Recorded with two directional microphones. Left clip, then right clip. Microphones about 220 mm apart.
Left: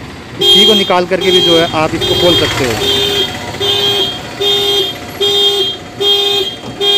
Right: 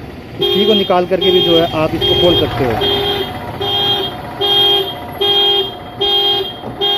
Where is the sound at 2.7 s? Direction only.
50° left (ahead or behind).